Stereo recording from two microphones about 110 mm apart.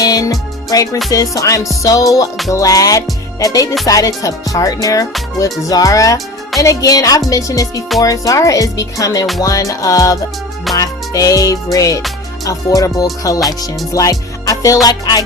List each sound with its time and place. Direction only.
0.0 s music: 35° left (ahead or behind)